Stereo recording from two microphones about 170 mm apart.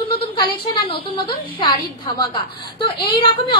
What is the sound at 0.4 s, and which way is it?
A woman's voice, 25° left (ahead or behind).